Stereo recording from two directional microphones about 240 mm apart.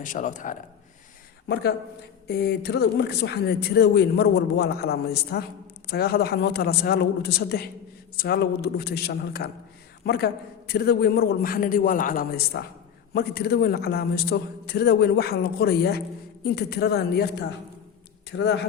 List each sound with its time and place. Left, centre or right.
0.0 s a man's voice: left
2.2 s a man's voice: left